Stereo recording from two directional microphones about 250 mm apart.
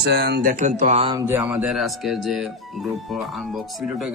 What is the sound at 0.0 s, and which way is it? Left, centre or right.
Speech, right.